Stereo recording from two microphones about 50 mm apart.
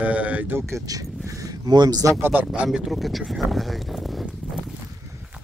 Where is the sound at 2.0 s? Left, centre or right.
Right.